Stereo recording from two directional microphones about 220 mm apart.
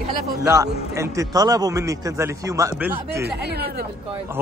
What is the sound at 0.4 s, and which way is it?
A man's voice, 15° right (ahead or behind).